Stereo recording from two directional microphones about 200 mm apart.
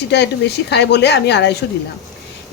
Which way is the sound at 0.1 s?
55° left (ahead or behind).